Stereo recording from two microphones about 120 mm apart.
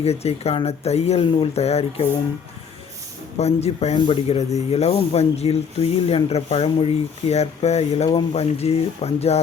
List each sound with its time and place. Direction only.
0.0 s speech: 60° left (ahead or behind)
3.3 s speech: 60° left (ahead or behind)